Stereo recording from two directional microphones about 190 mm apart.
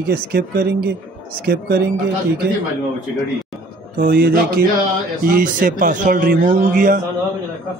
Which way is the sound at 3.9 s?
50° right (ahead or behind).